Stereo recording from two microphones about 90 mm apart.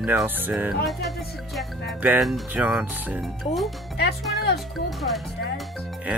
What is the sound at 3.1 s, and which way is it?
Speech, centre (ahead or behind).